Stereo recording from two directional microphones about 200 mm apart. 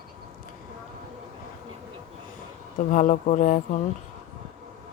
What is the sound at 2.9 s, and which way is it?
Speech, 40° left (ahead or behind).